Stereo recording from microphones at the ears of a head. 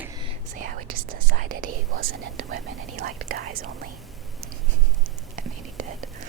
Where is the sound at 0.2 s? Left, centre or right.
Right.